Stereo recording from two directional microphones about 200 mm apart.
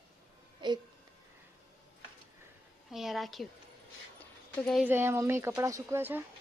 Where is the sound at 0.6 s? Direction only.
25° right (ahead or behind).